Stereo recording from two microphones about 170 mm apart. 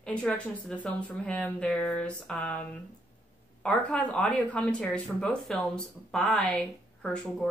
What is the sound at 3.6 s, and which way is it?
A woman's voice, 5° left (ahead or behind).